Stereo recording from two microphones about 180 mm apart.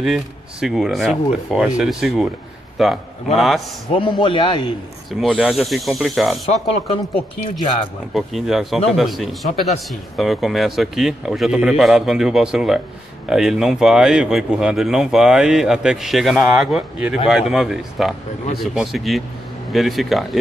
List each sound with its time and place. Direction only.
0.0 s speech: 5° right (ahead or behind)
3.9 s a man's voice: 30° left (ahead or behind)
5.2 s speech: centre (ahead or behind)
6.5 s speech: 35° left (ahead or behind)
8.1 s speech: centre (ahead or behind)